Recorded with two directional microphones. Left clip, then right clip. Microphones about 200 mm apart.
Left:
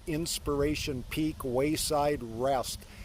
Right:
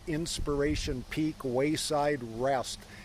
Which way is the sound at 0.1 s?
30° left (ahead or behind).